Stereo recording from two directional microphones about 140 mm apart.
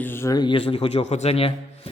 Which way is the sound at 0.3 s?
35° left (ahead or behind).